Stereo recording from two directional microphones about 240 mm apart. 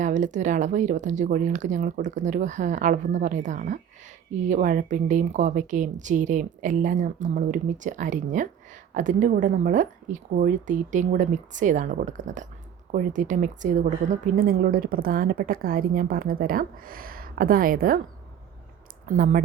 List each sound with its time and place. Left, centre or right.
0.0 s speech: right
19.0 s speech: right